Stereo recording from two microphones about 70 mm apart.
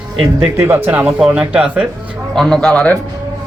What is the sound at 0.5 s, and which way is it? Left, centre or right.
Speech, right.